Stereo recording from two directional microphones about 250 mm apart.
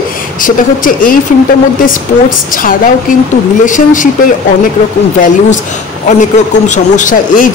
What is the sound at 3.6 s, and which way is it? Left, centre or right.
Speech, left.